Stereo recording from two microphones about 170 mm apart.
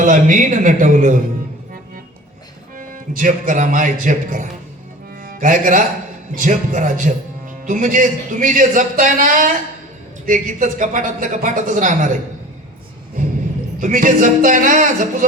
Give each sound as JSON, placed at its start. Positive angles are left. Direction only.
{"t": 0.0, "sound": "speech", "side_deg": -50}
{"t": 2.7, "sound": "a man's voice", "side_deg": -50}
{"t": 5.2, "sound": "music", "side_deg": -50}
{"t": 6.3, "sound": "speech", "side_deg": -50}
{"t": 13.7, "sound": "speech", "side_deg": -50}